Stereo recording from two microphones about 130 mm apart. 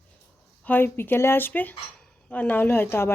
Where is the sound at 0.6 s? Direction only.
15° left (ahead or behind).